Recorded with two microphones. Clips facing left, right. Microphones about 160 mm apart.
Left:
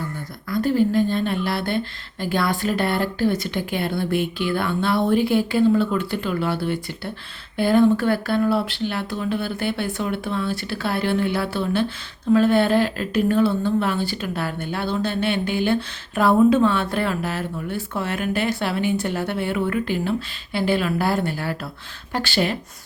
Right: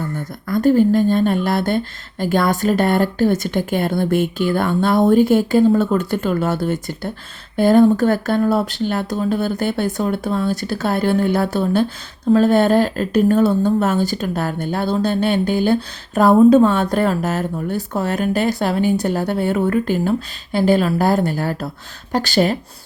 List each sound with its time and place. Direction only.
0.4 s speech: 45° right (ahead or behind)